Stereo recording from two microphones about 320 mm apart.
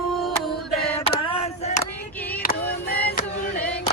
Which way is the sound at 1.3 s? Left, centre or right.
Centre.